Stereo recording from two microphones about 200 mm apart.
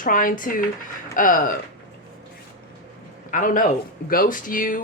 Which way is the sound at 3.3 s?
40° left (ahead or behind).